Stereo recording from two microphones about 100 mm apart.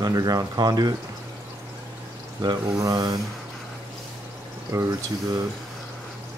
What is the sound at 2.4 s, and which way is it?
Speech, 40° right (ahead or behind).